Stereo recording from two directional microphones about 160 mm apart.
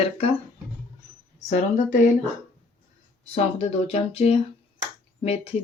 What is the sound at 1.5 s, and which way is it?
Speech, 50° left (ahead or behind).